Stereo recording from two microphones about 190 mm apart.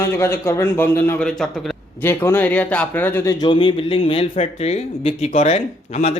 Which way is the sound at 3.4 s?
25° left (ahead or behind).